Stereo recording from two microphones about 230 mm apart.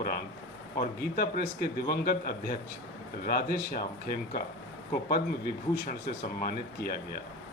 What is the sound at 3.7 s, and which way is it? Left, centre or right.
Speech, left.